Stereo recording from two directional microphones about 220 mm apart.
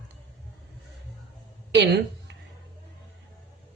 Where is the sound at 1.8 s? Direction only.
50° right (ahead or behind).